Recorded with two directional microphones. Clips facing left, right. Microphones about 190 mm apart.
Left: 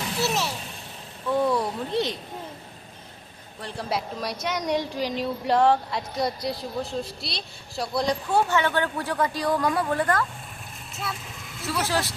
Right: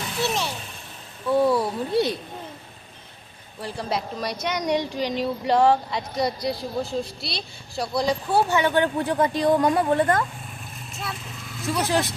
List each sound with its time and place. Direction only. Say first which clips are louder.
0.2 s speech: right 1 dB; centre (ahead or behind)
3.6 s speech: right 2 dB; 5° left (ahead or behind); by 10.2 s 25° right (ahead or behind)
11.7 s speech: right 3 dB; 15° right (ahead or behind)